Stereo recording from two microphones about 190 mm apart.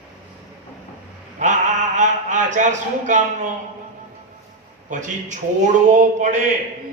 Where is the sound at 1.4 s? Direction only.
40° right (ahead or behind).